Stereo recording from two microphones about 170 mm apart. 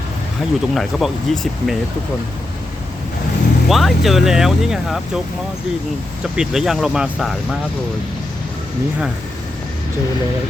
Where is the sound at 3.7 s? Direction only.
Centre (ahead or behind).